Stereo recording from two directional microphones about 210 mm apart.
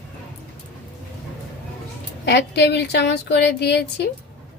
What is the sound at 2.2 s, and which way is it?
A woman's voice, 55° left (ahead or behind).